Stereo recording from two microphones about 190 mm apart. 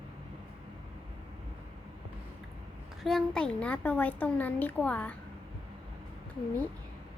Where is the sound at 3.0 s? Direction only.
Centre (ahead or behind).